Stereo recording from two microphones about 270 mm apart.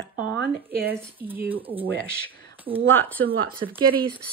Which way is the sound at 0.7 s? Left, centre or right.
Centre.